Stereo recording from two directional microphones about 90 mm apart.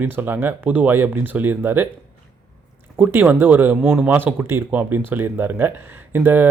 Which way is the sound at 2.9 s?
25° right (ahead or behind).